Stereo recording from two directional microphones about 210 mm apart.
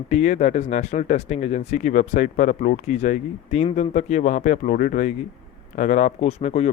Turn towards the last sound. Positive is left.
turn(degrees=30)  # may be behind; listen again after turning